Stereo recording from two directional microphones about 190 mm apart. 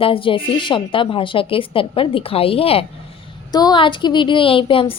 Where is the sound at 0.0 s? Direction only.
30° left (ahead or behind).